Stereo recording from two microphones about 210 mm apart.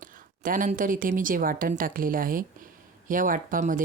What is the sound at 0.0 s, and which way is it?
Speech, 40° right (ahead or behind).